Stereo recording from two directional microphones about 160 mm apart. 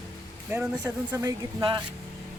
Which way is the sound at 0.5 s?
15° right (ahead or behind).